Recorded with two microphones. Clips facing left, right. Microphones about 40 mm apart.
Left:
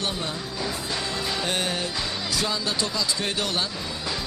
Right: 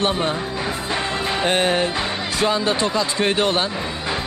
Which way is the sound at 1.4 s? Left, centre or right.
Right.